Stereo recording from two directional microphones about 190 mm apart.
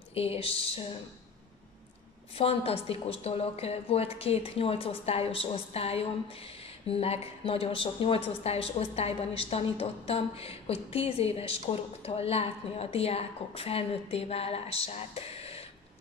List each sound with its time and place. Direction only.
0.1 s a woman's voice: 30° left (ahead or behind)
2.3 s a woman's voice: 30° left (ahead or behind)